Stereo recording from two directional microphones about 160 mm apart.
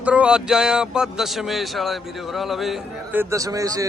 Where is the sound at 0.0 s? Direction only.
5° right (ahead or behind).